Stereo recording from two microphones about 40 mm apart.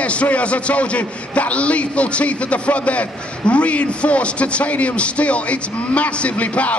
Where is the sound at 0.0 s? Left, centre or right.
Left.